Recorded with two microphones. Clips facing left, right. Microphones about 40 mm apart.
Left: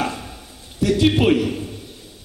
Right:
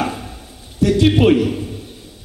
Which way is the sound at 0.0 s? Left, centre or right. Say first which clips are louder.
Right 2 dB; centre.